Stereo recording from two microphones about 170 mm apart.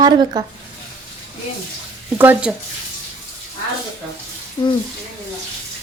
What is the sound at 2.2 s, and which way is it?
Speech, 10° right (ahead or behind).